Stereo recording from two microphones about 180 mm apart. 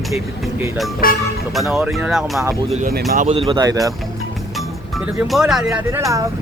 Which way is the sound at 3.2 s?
30° right (ahead or behind).